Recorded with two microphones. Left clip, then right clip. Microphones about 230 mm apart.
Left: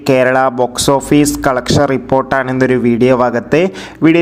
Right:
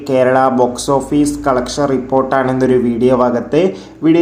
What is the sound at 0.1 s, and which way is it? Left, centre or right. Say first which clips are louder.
Speech: left 1 dB; left.